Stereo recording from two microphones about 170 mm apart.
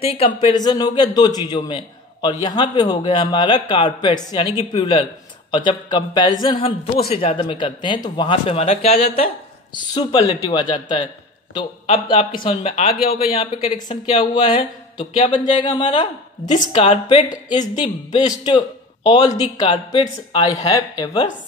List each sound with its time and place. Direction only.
0.0 s speech: 35° left (ahead or behind)
11.5 s a man's voice: 35° left (ahead or behind)